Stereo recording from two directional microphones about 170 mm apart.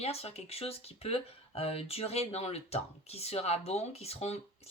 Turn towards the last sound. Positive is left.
turn(degrees=40)  # may be behind; listen again after turning